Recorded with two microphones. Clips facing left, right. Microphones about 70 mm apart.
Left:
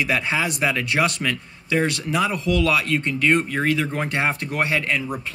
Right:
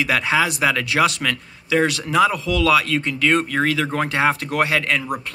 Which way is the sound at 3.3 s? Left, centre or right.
Right.